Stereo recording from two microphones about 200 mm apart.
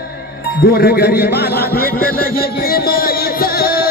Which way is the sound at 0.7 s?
50° left (ahead or behind).